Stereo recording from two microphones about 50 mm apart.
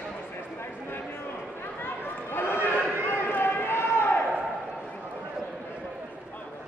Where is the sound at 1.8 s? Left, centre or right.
Left.